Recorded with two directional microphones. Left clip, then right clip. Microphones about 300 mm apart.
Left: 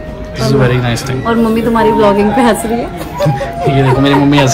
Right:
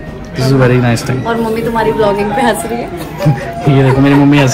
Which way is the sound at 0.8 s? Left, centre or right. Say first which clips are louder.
Right 2 dB; centre.